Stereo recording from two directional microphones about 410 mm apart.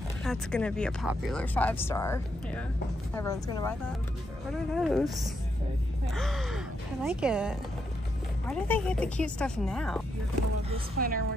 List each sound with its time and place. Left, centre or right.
0.2 s speech: centre
10.7 s a woman's voice: right